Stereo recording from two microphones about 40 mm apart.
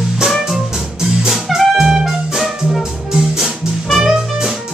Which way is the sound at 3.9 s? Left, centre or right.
Centre.